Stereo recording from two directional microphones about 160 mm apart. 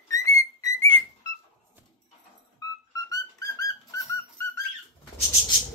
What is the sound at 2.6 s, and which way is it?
Music, 25° left (ahead or behind).